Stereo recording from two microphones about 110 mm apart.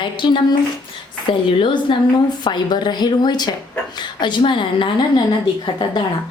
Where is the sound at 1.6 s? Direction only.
45° left (ahead or behind).